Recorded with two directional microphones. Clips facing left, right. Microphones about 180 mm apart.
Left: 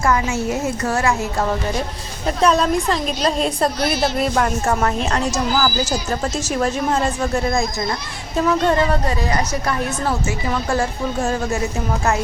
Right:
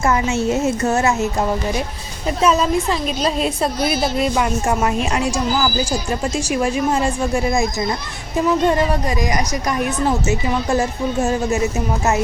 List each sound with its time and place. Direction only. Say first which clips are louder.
0.0 s a woman's voice: right 1 dB; 25° right (ahead or behind)
2.4 s a woman's voice: even; 5° right (ahead or behind); by 11.6 s 20° right (ahead or behind)